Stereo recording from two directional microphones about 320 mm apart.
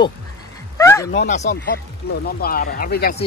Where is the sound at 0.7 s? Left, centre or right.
Centre.